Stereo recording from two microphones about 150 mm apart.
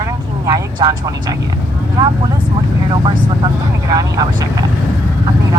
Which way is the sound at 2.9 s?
35° right (ahead or behind).